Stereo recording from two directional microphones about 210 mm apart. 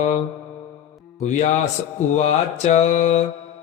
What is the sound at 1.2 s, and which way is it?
Mantra, 35° left (ahead or behind).